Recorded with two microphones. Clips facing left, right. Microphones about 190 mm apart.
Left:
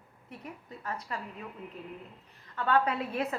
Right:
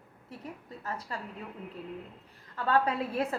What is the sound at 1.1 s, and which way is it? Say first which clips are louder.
Speech: left 1 dB; 30° right (ahead or behind).